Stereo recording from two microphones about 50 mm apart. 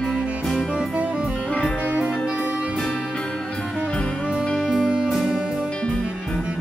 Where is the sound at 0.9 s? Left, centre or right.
Right.